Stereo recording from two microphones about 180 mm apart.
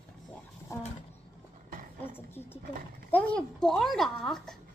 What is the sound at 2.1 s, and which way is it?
A woman's voice, 10° left (ahead or behind).